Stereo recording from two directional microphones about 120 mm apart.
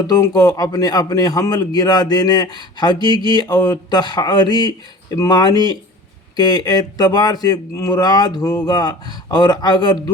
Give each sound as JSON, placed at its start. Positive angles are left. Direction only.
{"t": 0.1, "sound": "speech", "side_deg": 30}